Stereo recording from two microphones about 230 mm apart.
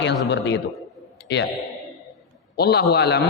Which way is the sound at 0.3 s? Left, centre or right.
Left.